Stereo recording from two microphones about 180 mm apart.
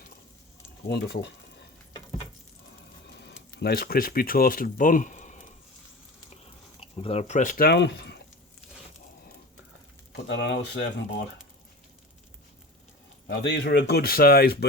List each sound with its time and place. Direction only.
0.9 s speech: 65° left (ahead or behind)
3.2 s speech: 70° left (ahead or behind); by 5.5 s 45° left (ahead or behind)
6.3 s a sound: 35° left (ahead or behind); by 8.2 s 65° left (ahead or behind)
10.2 s speech: 80° left
13.2 s speech: 70° left (ahead or behind)